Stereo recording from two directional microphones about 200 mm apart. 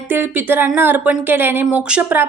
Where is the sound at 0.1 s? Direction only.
10° right (ahead or behind).